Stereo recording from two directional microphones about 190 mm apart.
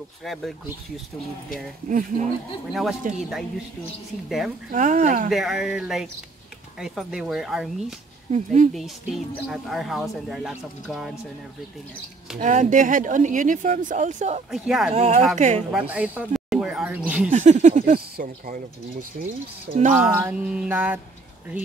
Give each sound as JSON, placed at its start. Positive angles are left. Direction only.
{"t": 0.2, "sound": "speech", "side_deg": 0}
{"t": 1.9, "sound": "speech", "side_deg": -45}
{"t": 2.7, "sound": "speech", "side_deg": 0}
{"t": 4.6, "sound": "a sound", "side_deg": -40}
{"t": 5.3, "sound": "speech", "side_deg": 0}
{"t": 8.7, "sound": "speech", "side_deg": 0}
{"t": 12.4, "sound": "speech", "side_deg": -40}
{"t": 14.5, "sound": "speech", "side_deg": 0}
{"t": 15.0, "sound": "a sound", "side_deg": -35}
{"t": 15.7, "sound": "speech", "side_deg": -5}
{"t": 17.3, "sound": "a sound", "side_deg": -40}
{"t": 17.9, "sound": "speech", "side_deg": -50}
{"t": 20.0, "sound": "mantra", "side_deg": -10}